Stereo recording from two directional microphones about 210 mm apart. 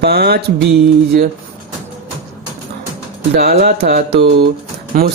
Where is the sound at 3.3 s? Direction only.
50° right (ahead or behind).